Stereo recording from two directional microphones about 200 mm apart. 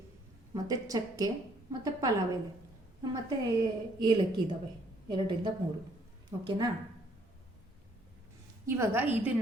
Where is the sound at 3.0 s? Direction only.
20° right (ahead or behind).